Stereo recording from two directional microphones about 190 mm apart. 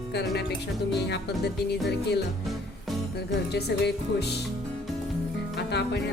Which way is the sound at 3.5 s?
60° left (ahead or behind).